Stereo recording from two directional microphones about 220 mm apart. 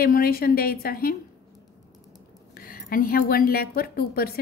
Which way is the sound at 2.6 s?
40° left (ahead or behind).